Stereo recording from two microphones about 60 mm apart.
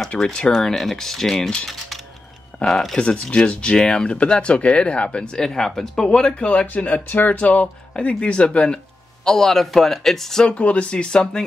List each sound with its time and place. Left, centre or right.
0.2 s speech: centre
2.6 s speech: centre
3.0 s speech: centre
6.0 s speech: centre